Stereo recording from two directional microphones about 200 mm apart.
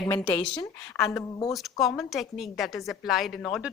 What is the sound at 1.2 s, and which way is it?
Speech, 15° left (ahead or behind).